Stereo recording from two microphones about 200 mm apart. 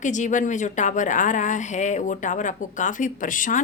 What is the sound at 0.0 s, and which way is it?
A woman's voice, 40° left (ahead or behind).